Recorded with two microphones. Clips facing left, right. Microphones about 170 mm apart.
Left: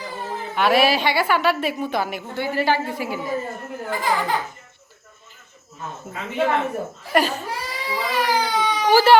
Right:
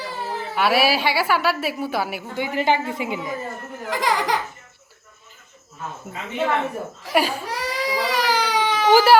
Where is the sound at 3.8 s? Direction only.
80° right.